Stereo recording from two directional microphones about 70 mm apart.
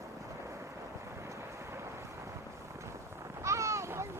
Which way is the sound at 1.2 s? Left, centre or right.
Right.